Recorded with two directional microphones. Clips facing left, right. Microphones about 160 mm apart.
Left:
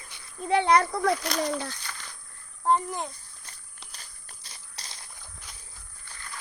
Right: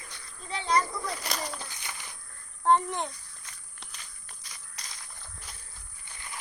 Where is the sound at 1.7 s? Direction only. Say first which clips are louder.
Left 2 dB; 15° right (ahead or behind).